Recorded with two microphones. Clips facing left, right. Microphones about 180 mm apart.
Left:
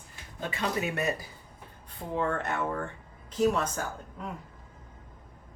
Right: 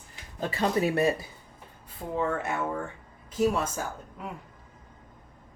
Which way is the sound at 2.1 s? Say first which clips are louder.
Right 1 dB; 5° right (ahead or behind).